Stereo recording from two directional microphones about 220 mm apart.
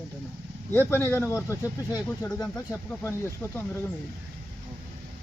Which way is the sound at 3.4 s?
10° left (ahead or behind).